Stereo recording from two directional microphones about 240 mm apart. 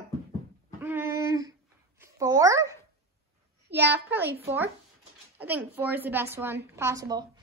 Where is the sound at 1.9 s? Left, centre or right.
Centre.